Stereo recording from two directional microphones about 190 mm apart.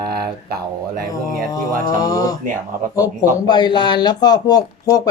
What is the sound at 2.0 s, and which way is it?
Speech, 20° left (ahead or behind).